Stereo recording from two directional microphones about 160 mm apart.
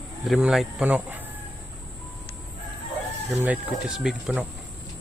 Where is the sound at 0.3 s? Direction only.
5° right (ahead or behind).